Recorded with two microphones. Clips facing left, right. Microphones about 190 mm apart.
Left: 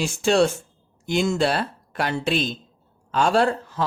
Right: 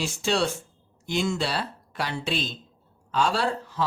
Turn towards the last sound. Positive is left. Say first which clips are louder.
# left 6 dB
turn(degrees=50)  # may be behind; listen again after turning